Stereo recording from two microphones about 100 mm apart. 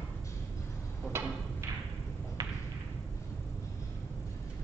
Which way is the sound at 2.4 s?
40° right (ahead or behind).